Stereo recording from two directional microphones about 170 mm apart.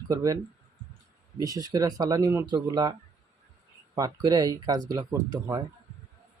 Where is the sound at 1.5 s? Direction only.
20° right (ahead or behind).